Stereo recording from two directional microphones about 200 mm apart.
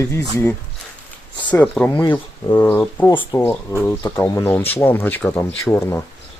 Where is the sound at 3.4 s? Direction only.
10° left (ahead or behind).